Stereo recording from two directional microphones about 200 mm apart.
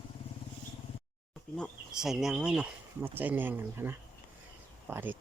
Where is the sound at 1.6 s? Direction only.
Centre (ahead or behind).